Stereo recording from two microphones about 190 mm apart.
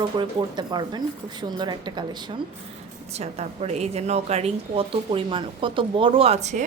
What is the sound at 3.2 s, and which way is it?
A woman's voice, 35° right (ahead or behind).